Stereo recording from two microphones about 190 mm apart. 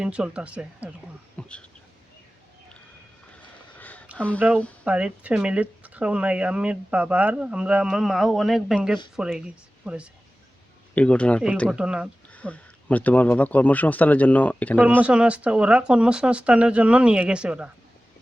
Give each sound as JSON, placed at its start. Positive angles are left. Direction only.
{"t": 0.0, "sound": "speech", "side_deg": -5}
{"t": 1.4, "sound": "a sound", "side_deg": 5}
{"t": 3.8, "sound": "a sound", "side_deg": 10}
{"t": 4.4, "sound": "speech", "side_deg": -10}
{"t": 10.9, "sound": "speech", "side_deg": 5}
{"t": 11.8, "sound": "speech", "side_deg": -5}
{"t": 12.3, "sound": "speech", "side_deg": 5}
{"t": 14.8, "sound": "speech", "side_deg": -5}